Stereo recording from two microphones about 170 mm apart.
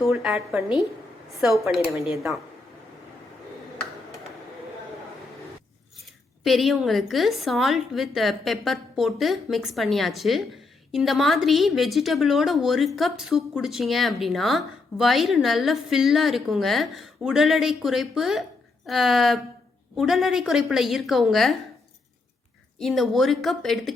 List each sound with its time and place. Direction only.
0.0 s a woman's voice: centre (ahead or behind)
6.4 s a woman's voice: centre (ahead or behind)
22.8 s a woman's voice: centre (ahead or behind)